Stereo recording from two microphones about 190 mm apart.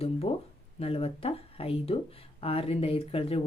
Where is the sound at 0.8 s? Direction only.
30° left (ahead or behind).